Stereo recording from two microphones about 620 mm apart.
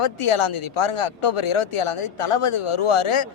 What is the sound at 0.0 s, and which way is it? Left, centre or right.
Speech, left.